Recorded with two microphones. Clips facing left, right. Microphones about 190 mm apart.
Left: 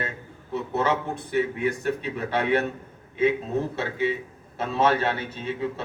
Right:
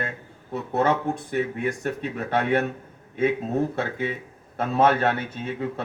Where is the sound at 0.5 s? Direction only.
50° right (ahead or behind).